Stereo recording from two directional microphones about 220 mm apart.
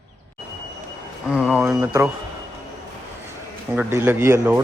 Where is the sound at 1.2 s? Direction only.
5° right (ahead or behind).